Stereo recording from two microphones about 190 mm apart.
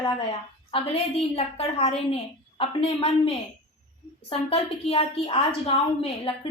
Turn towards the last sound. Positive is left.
turn(degrees=30)  # may be behind; listen again after turning